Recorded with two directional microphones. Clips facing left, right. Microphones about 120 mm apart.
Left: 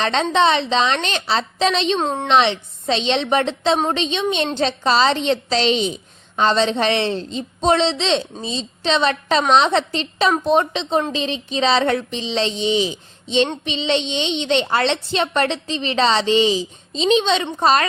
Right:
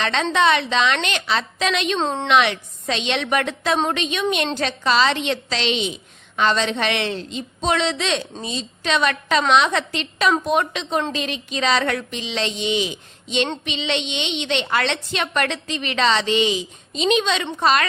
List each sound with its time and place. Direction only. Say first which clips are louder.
0.0 s a woman's voice: left 2 dB; 30° left (ahead or behind)
2.0 s a woman's voice: left 1 dB; 10° left (ahead or behind)
2.2 s a woman's voice: left 2 dB; 30° left (ahead or behind)